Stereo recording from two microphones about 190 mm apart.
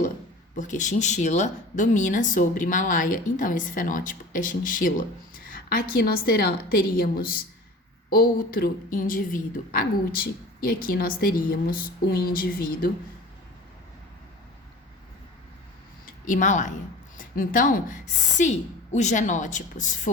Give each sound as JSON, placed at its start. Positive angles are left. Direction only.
{"t": 0.5, "sound": "speech", "side_deg": 40}
{"t": 16.0, "sound": "a woman's voice", "side_deg": 45}